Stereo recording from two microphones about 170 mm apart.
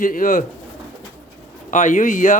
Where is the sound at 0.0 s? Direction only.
55° left (ahead or behind).